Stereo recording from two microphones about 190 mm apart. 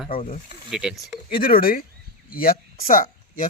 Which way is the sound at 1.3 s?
50° left (ahead or behind).